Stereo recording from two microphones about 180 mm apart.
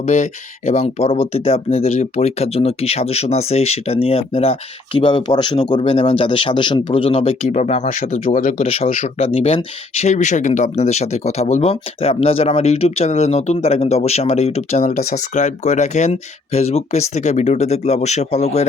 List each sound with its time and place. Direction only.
0.0 s speech: 40° left (ahead or behind)
8.6 s speech: 30° left (ahead or behind)